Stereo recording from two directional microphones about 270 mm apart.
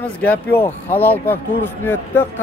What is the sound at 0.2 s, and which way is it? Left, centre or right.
Speech, centre.